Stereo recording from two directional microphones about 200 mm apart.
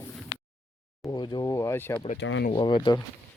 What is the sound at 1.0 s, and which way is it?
Speech, 20° left (ahead or behind).